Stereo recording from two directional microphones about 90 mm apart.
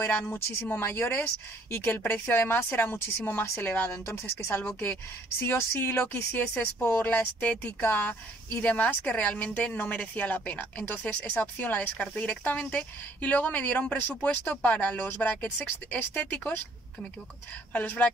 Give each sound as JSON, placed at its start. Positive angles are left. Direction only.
{"t": 0.3, "sound": "speech", "side_deg": 25}
{"t": 17.7, "sound": "speech", "side_deg": 15}